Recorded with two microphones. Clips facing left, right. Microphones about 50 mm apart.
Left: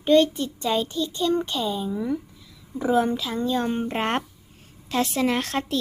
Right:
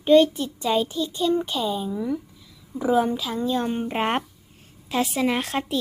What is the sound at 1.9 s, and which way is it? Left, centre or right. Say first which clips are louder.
A woman's voice: even; centre.